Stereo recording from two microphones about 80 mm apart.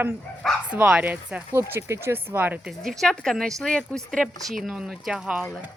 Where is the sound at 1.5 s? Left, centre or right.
Right.